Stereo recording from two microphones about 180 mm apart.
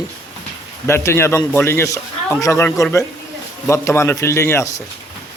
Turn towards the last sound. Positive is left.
turn(degrees=15)  # may be behind; listen again after turning